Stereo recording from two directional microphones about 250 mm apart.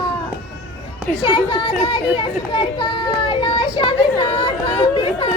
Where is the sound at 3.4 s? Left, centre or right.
Left.